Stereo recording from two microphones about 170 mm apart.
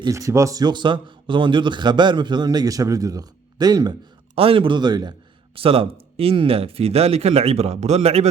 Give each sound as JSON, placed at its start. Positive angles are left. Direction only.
{"t": 0.0, "sound": "speech", "side_deg": -20}